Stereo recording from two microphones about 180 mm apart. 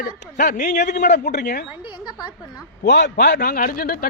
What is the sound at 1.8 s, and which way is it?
Speech, 25° left (ahead or behind).